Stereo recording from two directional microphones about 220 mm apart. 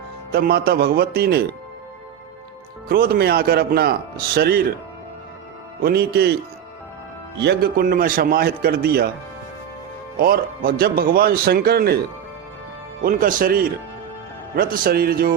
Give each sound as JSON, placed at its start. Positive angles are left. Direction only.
{"t": 0.3, "sound": "speech", "side_deg": -45}
{"t": 2.9, "sound": "speech", "side_deg": -45}
{"t": 5.8, "sound": "speech", "side_deg": -45}
{"t": 7.3, "sound": "speech", "side_deg": -50}
{"t": 10.2, "sound": "speech", "side_deg": -40}
{"t": 13.1, "sound": "speech", "side_deg": -40}